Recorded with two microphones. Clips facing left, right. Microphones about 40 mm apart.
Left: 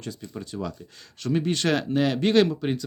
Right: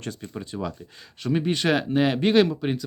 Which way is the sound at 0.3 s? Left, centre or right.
Right.